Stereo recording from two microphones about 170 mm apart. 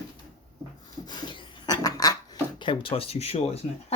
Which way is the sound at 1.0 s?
25° left (ahead or behind).